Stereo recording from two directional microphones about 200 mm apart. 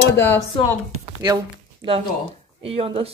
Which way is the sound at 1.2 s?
20° right (ahead or behind).